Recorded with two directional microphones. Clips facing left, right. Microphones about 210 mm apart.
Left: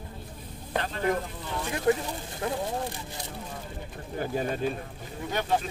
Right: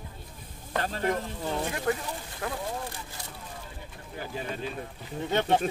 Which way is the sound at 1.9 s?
20° left (ahead or behind).